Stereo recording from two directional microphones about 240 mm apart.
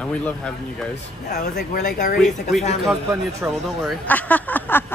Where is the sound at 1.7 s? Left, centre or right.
Left.